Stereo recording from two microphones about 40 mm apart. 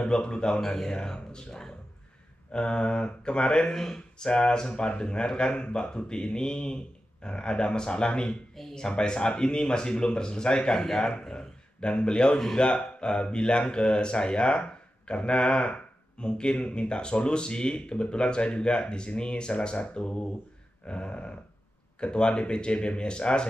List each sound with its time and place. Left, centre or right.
0.0 s speech: left
0.6 s speech: centre
3.7 s speech: centre
20.8 s a sound: left
22.0 s speech: left